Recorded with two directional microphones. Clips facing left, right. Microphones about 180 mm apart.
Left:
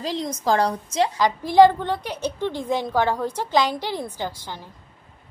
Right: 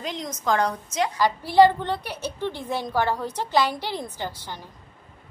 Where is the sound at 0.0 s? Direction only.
30° left (ahead or behind).